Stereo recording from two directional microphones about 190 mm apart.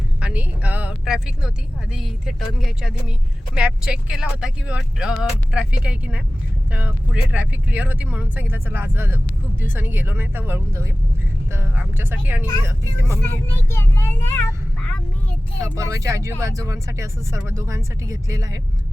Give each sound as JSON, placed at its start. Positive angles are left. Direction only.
{"t": 0.2, "sound": "speech", "side_deg": -5}
{"t": 13.2, "sound": "speech", "side_deg": 10}
{"t": 15.7, "sound": "speech", "side_deg": -15}